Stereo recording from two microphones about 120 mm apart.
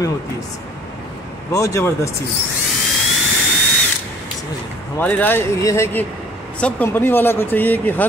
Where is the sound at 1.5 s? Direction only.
25° left (ahead or behind).